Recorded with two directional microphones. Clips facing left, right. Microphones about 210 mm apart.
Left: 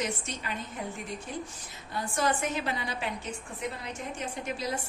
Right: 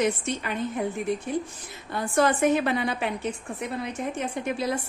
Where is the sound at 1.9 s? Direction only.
60° right (ahead or behind).